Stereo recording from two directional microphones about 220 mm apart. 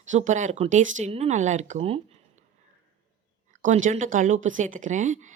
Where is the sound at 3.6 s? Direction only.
35° right (ahead or behind).